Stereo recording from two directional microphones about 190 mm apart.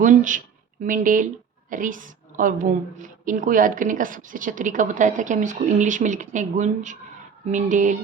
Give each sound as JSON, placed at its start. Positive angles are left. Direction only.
{"t": 0.0, "sound": "a woman's voice", "side_deg": -40}